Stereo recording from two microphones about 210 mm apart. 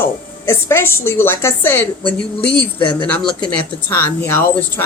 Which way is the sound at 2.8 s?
25° left (ahead or behind).